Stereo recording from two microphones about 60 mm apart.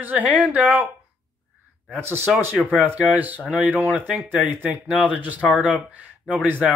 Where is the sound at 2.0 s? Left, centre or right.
Right.